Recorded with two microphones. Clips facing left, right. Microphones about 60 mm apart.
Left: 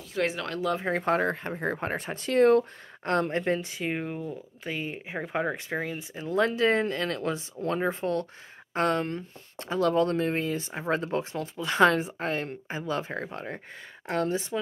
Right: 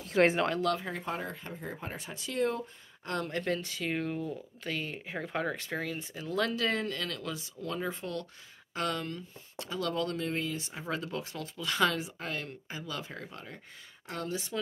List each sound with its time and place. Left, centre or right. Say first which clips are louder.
0.1 s speech: right 4 dB; right
0.8 s speech: left 11 dB; left
3.1 s speech: left 7 dB; left